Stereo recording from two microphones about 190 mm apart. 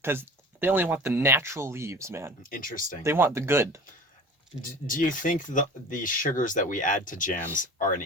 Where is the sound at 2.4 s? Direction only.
45° left (ahead or behind).